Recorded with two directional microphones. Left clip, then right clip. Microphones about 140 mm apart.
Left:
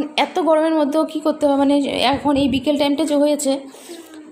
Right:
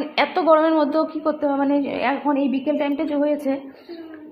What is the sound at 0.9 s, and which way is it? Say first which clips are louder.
A woman's voice: left 2 dB; 50° left (ahead or behind).